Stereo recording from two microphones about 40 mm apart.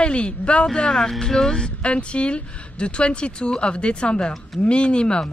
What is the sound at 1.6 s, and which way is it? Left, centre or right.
Speech, left.